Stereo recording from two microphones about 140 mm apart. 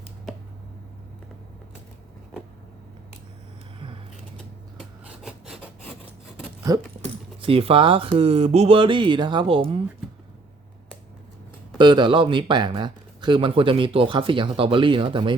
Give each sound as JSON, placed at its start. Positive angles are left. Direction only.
{"t": 4.8, "sound": "rub", "side_deg": -5}
{"t": 6.7, "sound": "a sound", "side_deg": -25}
{"t": 7.0, "sound": "speech", "side_deg": -40}
{"t": 11.8, "sound": "speech", "side_deg": -35}